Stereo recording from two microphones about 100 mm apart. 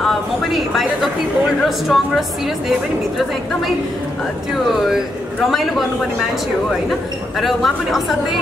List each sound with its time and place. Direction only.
0.0 s a woman's voice: centre (ahead or behind)
4.8 s a man's voice: centre (ahead or behind)
7.3 s a man's voice: centre (ahead or behind)